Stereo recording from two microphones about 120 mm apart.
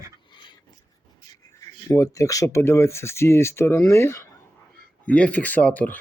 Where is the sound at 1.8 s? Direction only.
25° left (ahead or behind).